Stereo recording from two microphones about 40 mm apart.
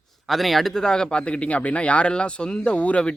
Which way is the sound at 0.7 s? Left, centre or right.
Centre.